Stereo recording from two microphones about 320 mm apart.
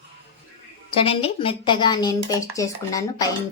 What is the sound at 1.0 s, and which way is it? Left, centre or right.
A woman's voice, centre.